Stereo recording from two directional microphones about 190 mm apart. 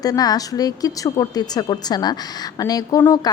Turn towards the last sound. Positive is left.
turn(degrees=20)  # may be behind; listen again after turning